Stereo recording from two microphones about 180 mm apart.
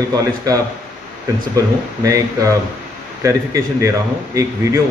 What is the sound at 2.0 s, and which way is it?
A man's voice, 20° right (ahead or behind).